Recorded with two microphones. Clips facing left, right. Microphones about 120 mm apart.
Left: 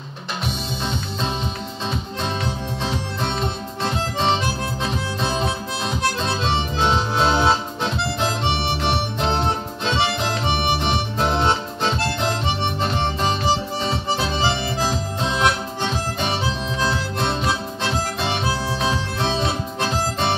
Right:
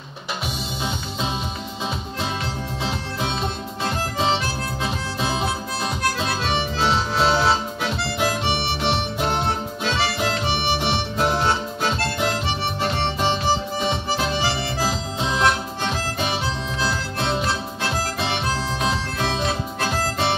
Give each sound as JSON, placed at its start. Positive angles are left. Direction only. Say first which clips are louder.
{"t": 2.8, "sound": "music", "louder": "left 1 dB", "side_deg": -5}
{"t": 4.8, "sound": "harmonica", "louder": "left 1 dB", "side_deg": -5}
{"t": 6.2, "sound": "music", "louder": "left 1 dB", "side_deg": 25}
{"t": 9.8, "sound": "music", "louder": "left 2 dB", "side_deg": 25}
{"t": 11.3, "sound": "music", "louder": "left 1 dB", "side_deg": 25}
{"t": 13.7, "sound": "harmonica", "louder": "even", "side_deg": -5}
{"t": 14.8, "sound": "music", "louder": "left 1 dB", "side_deg": -5}
{"t": 18.8, "sound": "music", "louder": "left 1 dB", "side_deg": 0}